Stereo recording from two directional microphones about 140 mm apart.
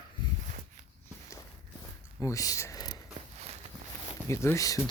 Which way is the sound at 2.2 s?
25° left (ahead or behind).